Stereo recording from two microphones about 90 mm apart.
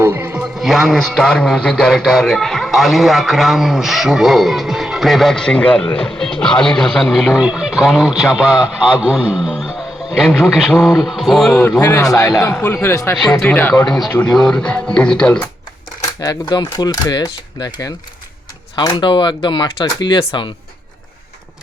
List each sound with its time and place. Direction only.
0.0 s music: 20° right (ahead or behind)
0.5 s a man's voice: 5° right (ahead or behind)
11.8 s a man's voice: 35° left (ahead or behind)
13.4 s speech: 20° left (ahead or behind)
13.8 s a man's voice: 5° left (ahead or behind)
16.5 s speech: 50° left (ahead or behind)
18.8 s speech: 60° left (ahead or behind)